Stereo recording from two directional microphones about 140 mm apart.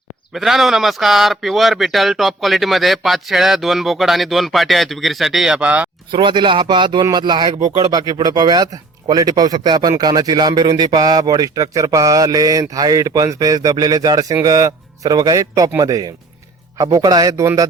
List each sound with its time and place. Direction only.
0.3 s speech: centre (ahead or behind)
6.1 s speech: 35° right (ahead or behind)